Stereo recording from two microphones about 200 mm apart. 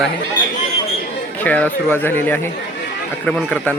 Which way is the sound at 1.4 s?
10° left (ahead or behind).